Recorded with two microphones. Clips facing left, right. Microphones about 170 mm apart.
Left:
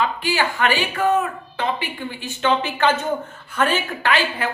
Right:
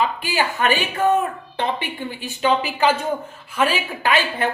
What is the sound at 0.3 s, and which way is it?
Speech, 15° right (ahead or behind).